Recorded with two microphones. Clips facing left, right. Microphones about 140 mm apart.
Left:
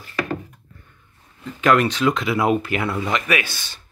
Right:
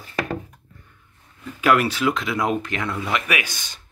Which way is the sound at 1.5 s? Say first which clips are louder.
Left 2 dB; 10° right (ahead or behind).